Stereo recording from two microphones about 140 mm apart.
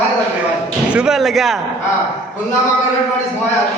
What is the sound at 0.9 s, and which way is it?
Speech, 5° right (ahead or behind).